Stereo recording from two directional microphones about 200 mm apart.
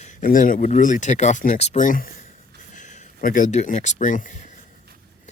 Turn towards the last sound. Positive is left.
turn(degrees=40)  # may be behind; listen again after turning